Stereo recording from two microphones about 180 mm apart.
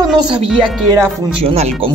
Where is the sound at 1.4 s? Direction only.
35° right (ahead or behind).